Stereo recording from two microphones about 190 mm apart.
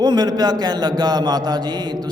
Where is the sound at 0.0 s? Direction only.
20° right (ahead or behind).